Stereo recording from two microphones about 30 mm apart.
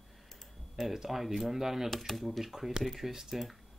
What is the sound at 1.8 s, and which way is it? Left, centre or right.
Speech, centre.